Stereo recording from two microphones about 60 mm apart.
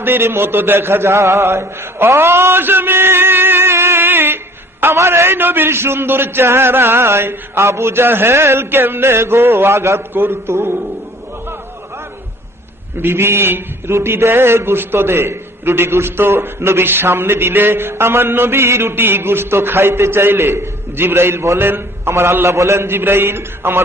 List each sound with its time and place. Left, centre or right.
0.0 s a sound: right
4.9 s a man's voice: right
10.2 s a man's voice: right
13.0 s a man's voice: right